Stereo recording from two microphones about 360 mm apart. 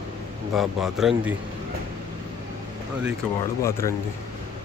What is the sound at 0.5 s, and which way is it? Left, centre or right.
Speech, centre.